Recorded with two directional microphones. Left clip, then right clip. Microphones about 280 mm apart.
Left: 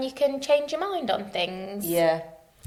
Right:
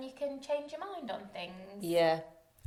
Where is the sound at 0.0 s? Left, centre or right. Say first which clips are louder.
Left 14 dB; left.